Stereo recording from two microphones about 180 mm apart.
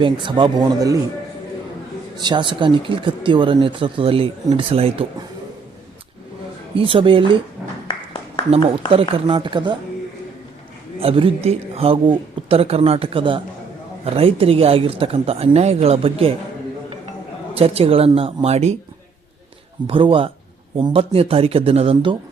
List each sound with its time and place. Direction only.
0.0 s speech: 25° right (ahead or behind)
2.1 s speech: 25° right (ahead or behind)
6.7 s speech: 30° right (ahead or behind)
8.9 s speech: 30° right (ahead or behind)
11.0 s speech: 30° right (ahead or behind)
17.5 s speech: 35° right (ahead or behind)
19.9 s speech: 30° right (ahead or behind)